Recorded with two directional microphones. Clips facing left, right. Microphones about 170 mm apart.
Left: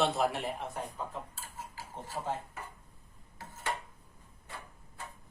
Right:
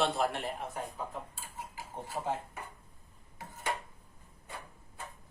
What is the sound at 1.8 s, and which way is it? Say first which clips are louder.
Speech: right 1 dB; 15° right (ahead or behind).